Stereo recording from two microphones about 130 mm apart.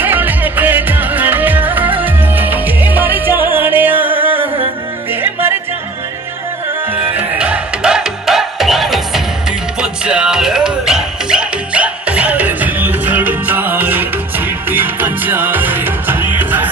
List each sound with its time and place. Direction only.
0.0 s music: 15° right (ahead or behind)
5.1 s music: 15° right (ahead or behind)
7.3 s music: 10° right (ahead or behind)